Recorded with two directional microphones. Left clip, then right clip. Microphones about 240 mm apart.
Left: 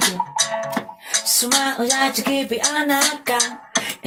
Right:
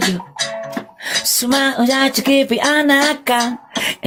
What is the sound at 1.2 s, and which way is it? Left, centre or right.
Speech, right.